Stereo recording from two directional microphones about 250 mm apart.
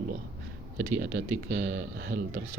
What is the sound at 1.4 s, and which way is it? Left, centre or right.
Speech, right.